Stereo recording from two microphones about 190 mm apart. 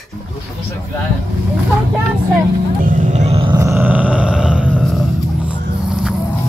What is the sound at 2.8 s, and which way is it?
Vehicle, 45° right (ahead or behind).